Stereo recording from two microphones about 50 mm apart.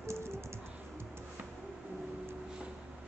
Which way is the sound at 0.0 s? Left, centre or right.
Right.